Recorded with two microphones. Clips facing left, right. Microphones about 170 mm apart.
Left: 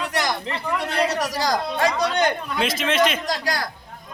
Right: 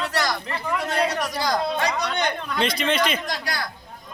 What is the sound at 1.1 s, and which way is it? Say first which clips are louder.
Speech: left 2 dB; 40° left (ahead or behind).